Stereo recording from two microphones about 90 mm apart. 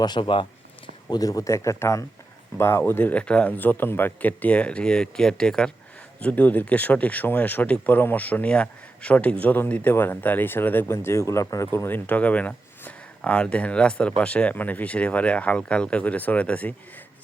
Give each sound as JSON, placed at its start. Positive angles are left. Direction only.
{"t": 0.0, "sound": "speech", "side_deg": 65}
{"t": 1.1, "sound": "speech", "side_deg": 40}